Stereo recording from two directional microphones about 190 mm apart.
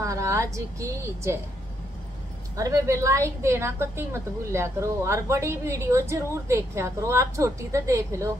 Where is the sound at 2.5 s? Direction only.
15° right (ahead or behind).